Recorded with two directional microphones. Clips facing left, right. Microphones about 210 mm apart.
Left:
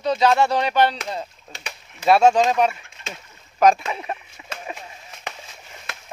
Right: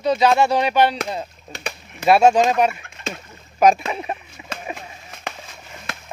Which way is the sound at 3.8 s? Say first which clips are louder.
Right 2 dB; 20° right (ahead or behind).